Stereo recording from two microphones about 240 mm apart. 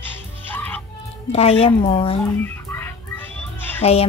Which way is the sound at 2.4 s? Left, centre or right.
Centre.